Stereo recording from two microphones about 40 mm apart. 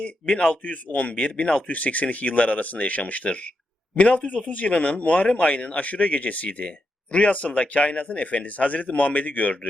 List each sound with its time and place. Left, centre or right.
0.0 s speech: left
0.6 s speech: left
1.6 s speech: left